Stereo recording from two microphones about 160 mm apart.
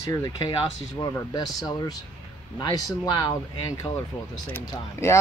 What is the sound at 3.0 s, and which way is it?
Speech, 25° left (ahead or behind).